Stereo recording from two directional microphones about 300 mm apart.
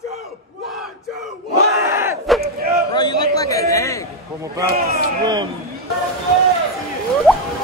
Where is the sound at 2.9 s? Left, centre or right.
Centre.